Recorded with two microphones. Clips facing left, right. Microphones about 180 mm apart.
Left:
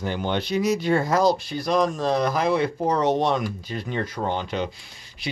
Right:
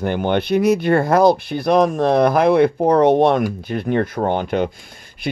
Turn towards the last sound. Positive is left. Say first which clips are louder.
# right 7 dB
turn(degrees=-55)  # may be behind; listen again after turning